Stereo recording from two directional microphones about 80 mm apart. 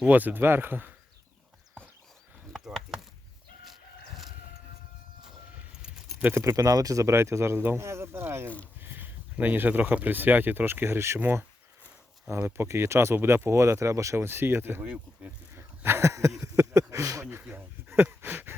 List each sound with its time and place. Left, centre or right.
0.0 s speech: right
2.6 s chop: centre
3.6 s chicken: centre
6.3 s speech: right
12.5 s speech: right
16.4 s a sound: right
17.5 s a sound: right